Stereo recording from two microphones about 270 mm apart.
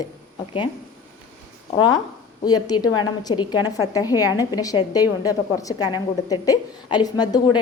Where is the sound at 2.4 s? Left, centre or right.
Centre.